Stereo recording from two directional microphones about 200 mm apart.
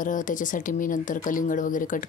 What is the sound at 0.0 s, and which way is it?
Speech, 40° left (ahead or behind).